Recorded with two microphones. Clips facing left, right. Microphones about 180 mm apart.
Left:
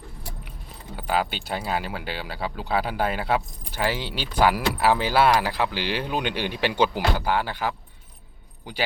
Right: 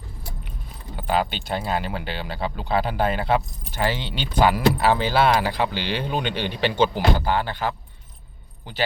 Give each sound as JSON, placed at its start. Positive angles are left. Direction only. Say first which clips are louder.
{"t": 0.9, "sound": "speech", "louder": "right 2 dB", "side_deg": 5}